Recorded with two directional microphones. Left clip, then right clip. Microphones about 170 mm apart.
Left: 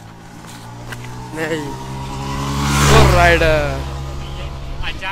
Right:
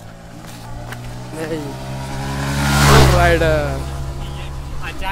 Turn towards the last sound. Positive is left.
turn(degrees=-60)  # may be behind; listen again after turning